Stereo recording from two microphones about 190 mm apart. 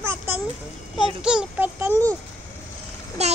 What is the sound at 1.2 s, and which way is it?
Child singing, 5° right (ahead or behind).